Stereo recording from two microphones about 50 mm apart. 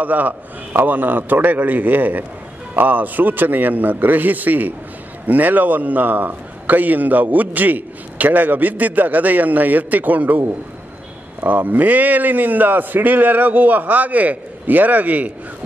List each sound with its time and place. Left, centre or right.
0.0 s a man's voice: right
11.4 s a man's voice: right